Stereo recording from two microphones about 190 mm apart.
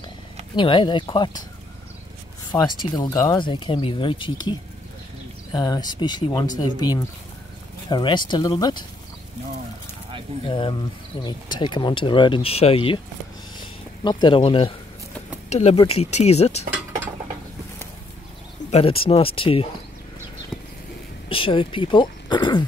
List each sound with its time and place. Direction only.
0.6 s speech: 25° left (ahead or behind)
2.8 s speech: 20° left (ahead or behind)
10.5 s speech: 25° left (ahead or behind)
13.6 s a sound: 25° left (ahead or behind)
15.5 s speech: 35° left (ahead or behind)
18.7 s speech: 30° left (ahead or behind)
21.3 s speech: 30° left (ahead or behind)